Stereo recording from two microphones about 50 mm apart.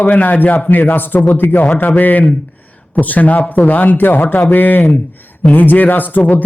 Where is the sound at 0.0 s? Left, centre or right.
Left.